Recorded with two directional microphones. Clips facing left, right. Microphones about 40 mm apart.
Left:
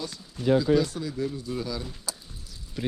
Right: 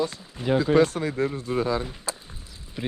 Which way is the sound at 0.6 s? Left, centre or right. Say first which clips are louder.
Right 4 dB; right.